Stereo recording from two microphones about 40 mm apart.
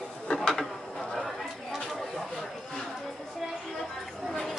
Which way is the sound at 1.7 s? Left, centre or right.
Centre.